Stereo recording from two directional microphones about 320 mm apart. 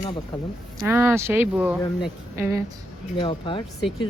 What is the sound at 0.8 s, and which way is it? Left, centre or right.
Speech, centre.